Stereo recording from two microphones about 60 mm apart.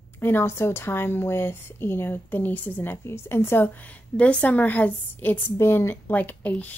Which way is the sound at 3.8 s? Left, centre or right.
Left.